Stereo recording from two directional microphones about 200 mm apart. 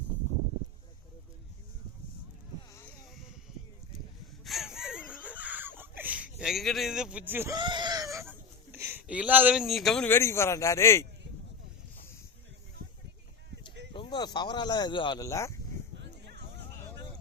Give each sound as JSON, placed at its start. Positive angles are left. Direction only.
{"t": 4.4, "sound": "wheeze", "side_deg": 0}
{"t": 13.9, "sound": "speech", "side_deg": 25}
{"t": 16.0, "sound": "a sound", "side_deg": -55}